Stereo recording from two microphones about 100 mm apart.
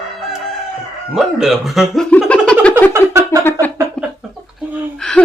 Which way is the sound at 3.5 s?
20° left (ahead or behind).